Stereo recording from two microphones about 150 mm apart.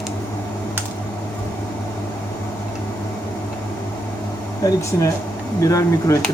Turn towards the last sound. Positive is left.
turn(degrees=20)  # may be behind; listen again after turning